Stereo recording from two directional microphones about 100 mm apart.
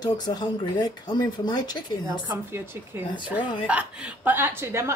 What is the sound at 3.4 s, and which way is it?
Speech, 50° left (ahead or behind).